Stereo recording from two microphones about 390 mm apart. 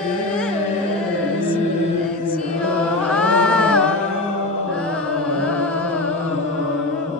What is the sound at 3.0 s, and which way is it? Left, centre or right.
Music, centre.